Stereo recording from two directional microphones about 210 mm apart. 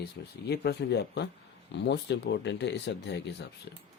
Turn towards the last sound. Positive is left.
turn(degrees=55)  # may be behind; listen again after turning